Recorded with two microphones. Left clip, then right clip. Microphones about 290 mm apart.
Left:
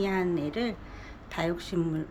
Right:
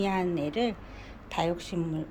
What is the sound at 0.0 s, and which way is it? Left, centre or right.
A woman's voice, centre.